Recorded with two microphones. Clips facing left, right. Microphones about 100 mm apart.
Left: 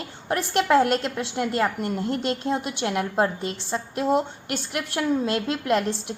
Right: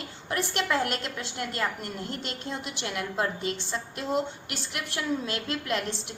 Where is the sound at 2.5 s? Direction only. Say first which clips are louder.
Left 6 dB; 50° left (ahead or behind).